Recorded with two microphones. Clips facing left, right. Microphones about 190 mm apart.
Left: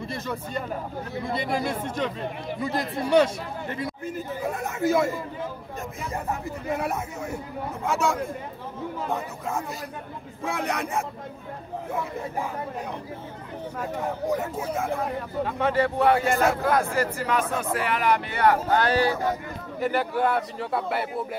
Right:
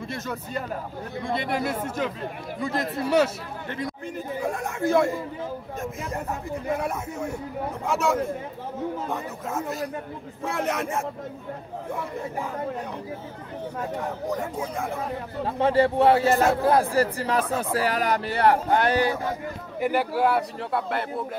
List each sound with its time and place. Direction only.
0.1 s speech: centre (ahead or behind)
7.8 s speech: centre (ahead or behind)
14.3 s speech: 5° left (ahead or behind)
15.4 s speech: 30° right (ahead or behind)
18.8 s speech: 20° right (ahead or behind)